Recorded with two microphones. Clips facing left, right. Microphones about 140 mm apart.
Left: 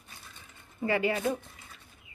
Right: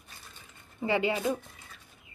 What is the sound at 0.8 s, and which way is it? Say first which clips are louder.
Speech: even; 20° right (ahead or behind).